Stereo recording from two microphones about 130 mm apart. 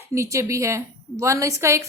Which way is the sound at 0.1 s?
25° right (ahead or behind).